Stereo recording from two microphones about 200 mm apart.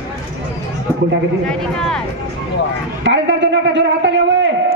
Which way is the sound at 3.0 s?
60° right (ahead or behind).